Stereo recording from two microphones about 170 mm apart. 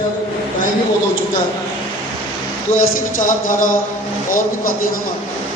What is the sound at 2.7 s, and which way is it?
A man's voice, 50° left (ahead or behind).